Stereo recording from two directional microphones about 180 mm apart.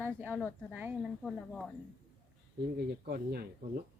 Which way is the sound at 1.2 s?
Centre (ahead or behind).